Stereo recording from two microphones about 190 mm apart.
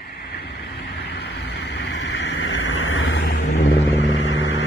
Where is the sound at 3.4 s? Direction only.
40° left (ahead or behind).